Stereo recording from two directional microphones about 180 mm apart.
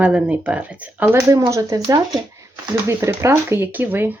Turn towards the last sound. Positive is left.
turn(degrees=-10)  # may be behind; listen again after turning